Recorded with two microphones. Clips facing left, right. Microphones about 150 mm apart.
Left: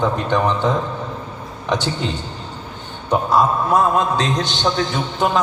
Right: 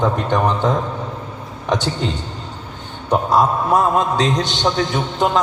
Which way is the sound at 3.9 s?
20° right (ahead or behind).